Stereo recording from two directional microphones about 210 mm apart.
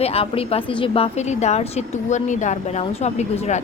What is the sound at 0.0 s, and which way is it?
A woman's voice, 30° left (ahead or behind).